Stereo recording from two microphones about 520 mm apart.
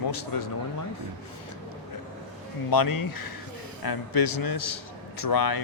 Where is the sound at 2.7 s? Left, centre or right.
Left.